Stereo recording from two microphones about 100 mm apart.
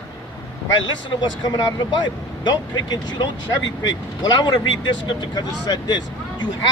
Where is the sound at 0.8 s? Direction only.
45° left (ahead or behind).